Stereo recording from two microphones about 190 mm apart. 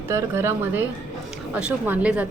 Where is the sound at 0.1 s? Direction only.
15° right (ahead or behind).